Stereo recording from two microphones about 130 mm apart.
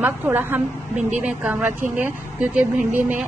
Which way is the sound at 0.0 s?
15° right (ahead or behind).